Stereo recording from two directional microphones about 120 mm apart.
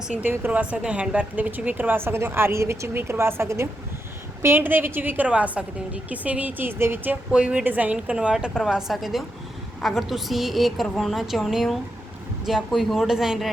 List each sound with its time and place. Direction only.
0.2 s a woman's voice: 15° right (ahead or behind)